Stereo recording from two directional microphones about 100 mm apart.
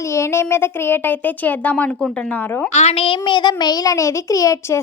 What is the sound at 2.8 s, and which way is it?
A child's voice, 75° left (ahead or behind).